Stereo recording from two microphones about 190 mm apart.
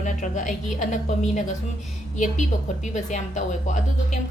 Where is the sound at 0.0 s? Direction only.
40° left (ahead or behind).